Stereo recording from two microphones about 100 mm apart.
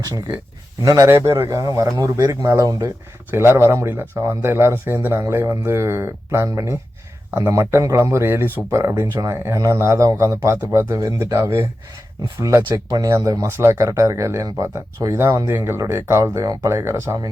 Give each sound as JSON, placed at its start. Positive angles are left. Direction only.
{"t": 0.8, "sound": "speech", "side_deg": -35}
{"t": 3.3, "sound": "speech", "side_deg": -25}